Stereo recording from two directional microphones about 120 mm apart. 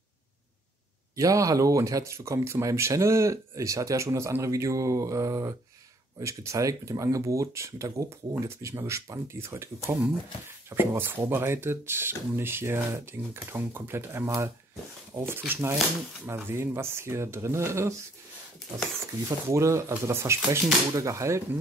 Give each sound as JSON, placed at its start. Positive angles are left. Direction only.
{"t": 1.1, "sound": "speech", "side_deg": -30}
{"t": 19.2, "sound": "speech", "side_deg": -25}